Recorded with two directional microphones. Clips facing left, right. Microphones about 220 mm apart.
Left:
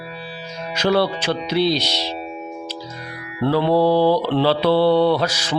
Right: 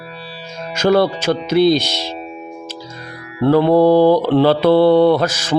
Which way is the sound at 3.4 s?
45° right (ahead or behind).